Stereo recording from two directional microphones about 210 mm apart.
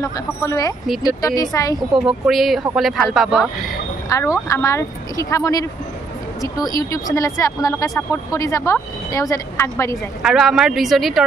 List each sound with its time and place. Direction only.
0.0 s speech: 15° left (ahead or behind)
1.8 s speech: centre (ahead or behind)
4.1 s speech: 15° left (ahead or behind)
10.2 s speech: centre (ahead or behind)